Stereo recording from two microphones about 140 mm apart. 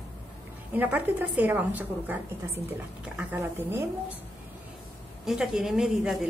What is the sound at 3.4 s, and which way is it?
Speech, 15° right (ahead or behind).